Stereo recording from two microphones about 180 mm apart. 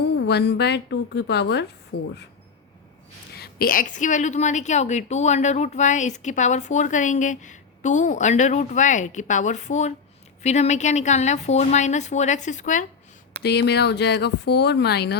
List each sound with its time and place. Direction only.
0.0 s speech: 70° left (ahead or behind)
3.3 s a woman's voice: 60° left (ahead or behind); by 12.8 s 45° left (ahead or behind)
13.4 s speech: 65° left (ahead or behind)